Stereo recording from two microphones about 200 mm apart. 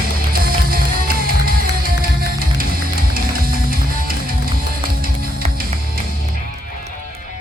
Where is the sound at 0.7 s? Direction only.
45° right (ahead or behind).